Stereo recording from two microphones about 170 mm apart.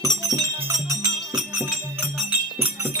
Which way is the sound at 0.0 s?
20° right (ahead or behind).